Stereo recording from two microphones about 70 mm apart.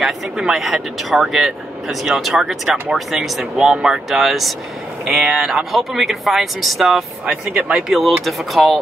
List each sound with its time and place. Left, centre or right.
0.0 s speech: centre
7.2 s speech: centre
8.0 s speech: centre